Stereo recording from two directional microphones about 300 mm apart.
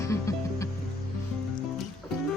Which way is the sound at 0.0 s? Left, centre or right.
Centre.